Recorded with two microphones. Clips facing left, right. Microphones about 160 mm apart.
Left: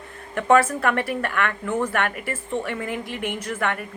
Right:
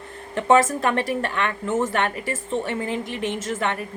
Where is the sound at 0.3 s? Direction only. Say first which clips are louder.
Even; 20° right (ahead or behind).